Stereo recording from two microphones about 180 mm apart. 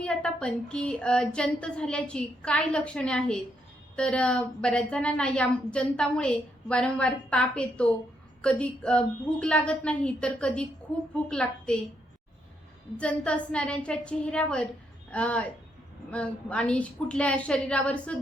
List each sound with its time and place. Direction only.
0.0 s a woman's voice: 5° left (ahead or behind)
13.0 s a woman's voice: 5° left (ahead or behind)